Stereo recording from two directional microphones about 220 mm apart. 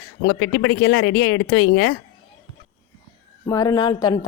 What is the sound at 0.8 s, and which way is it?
Speech, 70° left (ahead or behind).